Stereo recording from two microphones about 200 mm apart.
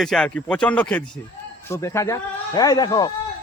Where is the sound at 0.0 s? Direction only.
5° left (ahead or behind).